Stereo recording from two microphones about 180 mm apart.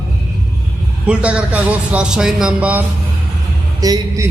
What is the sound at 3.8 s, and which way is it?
Speech, 20° right (ahead or behind).